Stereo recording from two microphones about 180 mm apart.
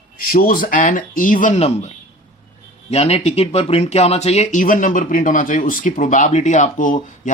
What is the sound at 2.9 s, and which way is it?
Speech, 35° left (ahead or behind).